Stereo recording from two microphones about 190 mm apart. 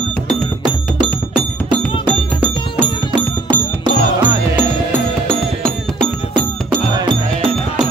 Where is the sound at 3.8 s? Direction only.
20° right (ahead or behind).